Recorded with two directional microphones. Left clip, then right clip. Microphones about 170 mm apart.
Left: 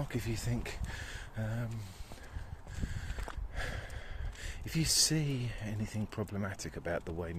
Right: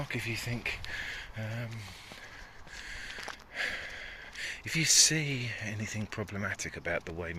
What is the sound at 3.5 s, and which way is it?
Speech, 30° left (ahead or behind).